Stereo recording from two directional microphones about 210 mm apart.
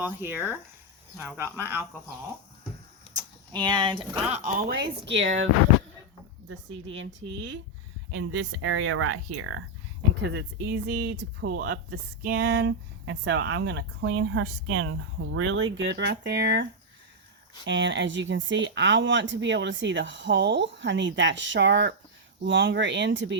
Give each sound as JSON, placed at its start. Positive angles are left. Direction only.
{"t": 0.0, "sound": "speech", "side_deg": -10}
{"t": 3.2, "sound": "speech", "side_deg": -20}
{"t": 4.4, "sound": "speech", "side_deg": -50}
{"t": 6.5, "sound": "speech", "side_deg": -65}
{"t": 10.2, "sound": "speech", "side_deg": -50}
{"t": 17.7, "sound": "speech", "side_deg": -60}